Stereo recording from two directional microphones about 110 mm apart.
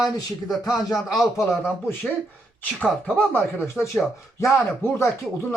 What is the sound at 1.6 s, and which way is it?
Speech, 20° left (ahead or behind).